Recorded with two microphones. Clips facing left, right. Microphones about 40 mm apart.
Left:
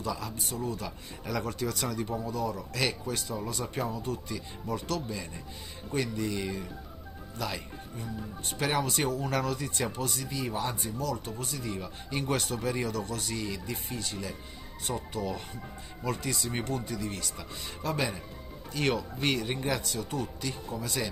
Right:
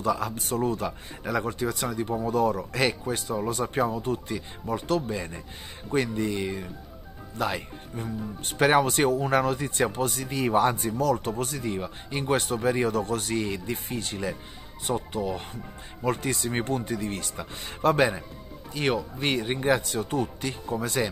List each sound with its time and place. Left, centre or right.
0.0 s speech: right
0.4 s speech: right
0.7 s speech: right
1.3 s speech: right
2.2 s speech: right
2.7 s speech: right
11.6 s speech: right
15.1 s speech: right
16.0 s speech: right
18.7 s speech: right